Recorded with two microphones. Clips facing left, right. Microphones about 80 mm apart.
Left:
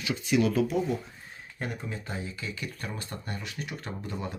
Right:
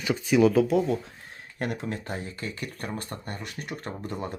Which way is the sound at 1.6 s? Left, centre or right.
Right.